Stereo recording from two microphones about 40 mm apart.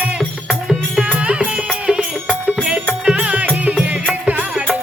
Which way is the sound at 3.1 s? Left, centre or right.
Right.